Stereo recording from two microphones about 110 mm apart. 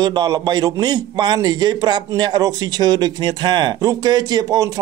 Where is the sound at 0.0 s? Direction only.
40° right (ahead or behind).